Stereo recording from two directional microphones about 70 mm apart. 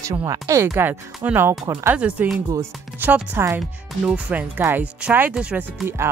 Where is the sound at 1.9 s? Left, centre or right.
Centre; by 3.6 s right.